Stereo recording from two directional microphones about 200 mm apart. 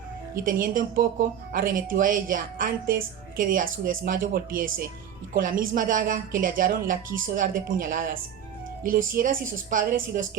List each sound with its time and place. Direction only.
0.4 s speech: 45° right (ahead or behind)